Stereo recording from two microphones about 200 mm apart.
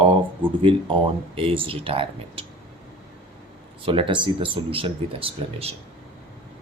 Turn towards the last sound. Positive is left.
turn(degrees=-30)  # may be behind; listen again after turning